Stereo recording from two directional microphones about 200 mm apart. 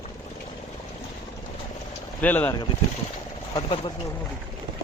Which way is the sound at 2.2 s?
10° left (ahead or behind).